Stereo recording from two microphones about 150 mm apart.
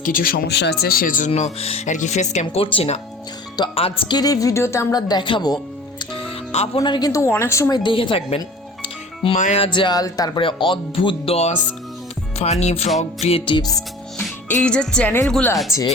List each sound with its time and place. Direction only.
0.0 s speech: 70° left (ahead or behind)
1.5 s speech: 45° left (ahead or behind)
6.7 s speech: 30° left (ahead or behind)
7.8 s speech: 35° left (ahead or behind)
13.7 s music: centre (ahead or behind)
14.4 s speech: 10° left (ahead or behind)